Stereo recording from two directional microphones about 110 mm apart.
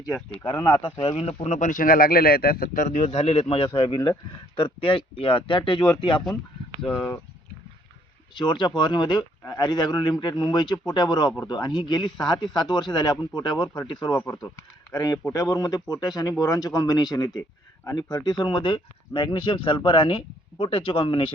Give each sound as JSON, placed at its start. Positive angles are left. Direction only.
{"t": 0.5, "sound": "speech", "side_deg": 45}
{"t": 2.8, "sound": "a man's voice", "side_deg": 90}
{"t": 3.7, "sound": "speech", "side_deg": 45}
{"t": 6.9, "sound": "speech", "side_deg": 20}
{"t": 8.4, "sound": "speech", "side_deg": 40}
{"t": 14.2, "sound": "speech", "side_deg": 20}
{"t": 14.9, "sound": "speech", "side_deg": 35}